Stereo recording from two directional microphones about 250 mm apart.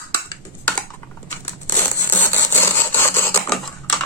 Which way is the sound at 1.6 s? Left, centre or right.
Centre.